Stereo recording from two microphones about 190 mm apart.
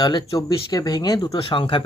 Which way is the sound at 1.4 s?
30° left (ahead or behind).